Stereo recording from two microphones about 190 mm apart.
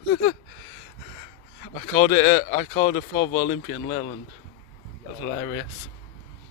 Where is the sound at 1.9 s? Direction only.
25° left (ahead or behind).